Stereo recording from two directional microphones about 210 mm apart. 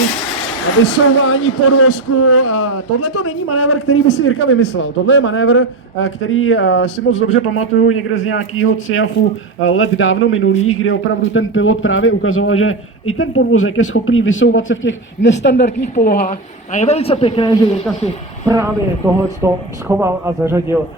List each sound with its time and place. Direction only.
1.0 s speech: 75° left (ahead or behind); by 4.0 s 90° left
4.4 s a man's voice: 70° left (ahead or behind)
6.8 s speech: 35° left (ahead or behind)
7.3 s a man's voice: 75° left (ahead or behind); by 15.7 s 55° left (ahead or behind)
16.0 s a man's voice: 40° left (ahead or behind); by 17.7 s 20° left (ahead or behind)
18.4 s speech: 15° right (ahead or behind)